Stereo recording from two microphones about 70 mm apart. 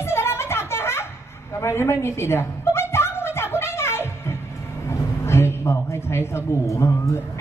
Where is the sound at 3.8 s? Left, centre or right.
Left.